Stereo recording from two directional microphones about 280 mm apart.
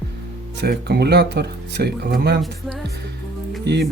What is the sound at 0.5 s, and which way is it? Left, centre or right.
Speech, right.